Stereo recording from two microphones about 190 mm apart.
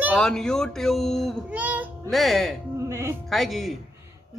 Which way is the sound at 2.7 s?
15° right (ahead or behind).